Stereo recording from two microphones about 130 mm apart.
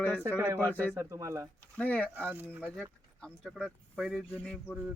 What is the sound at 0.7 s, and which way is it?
Speech, 10° left (ahead or behind).